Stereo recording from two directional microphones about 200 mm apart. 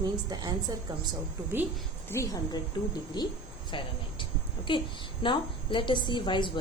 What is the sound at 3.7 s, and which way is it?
A woman's voice, 25° left (ahead or behind).